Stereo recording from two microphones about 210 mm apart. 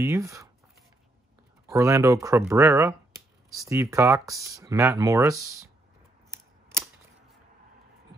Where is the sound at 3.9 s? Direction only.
15° right (ahead or behind).